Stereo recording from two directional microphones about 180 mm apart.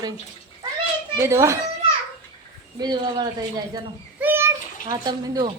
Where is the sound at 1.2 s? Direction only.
15° right (ahead or behind).